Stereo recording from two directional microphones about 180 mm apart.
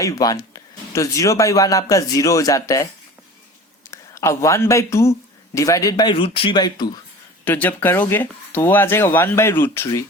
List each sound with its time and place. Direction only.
0.0 s speech: 20° left (ahead or behind)
3.9 s speech: 15° left (ahead or behind)
7.4 s speech: 10° left (ahead or behind)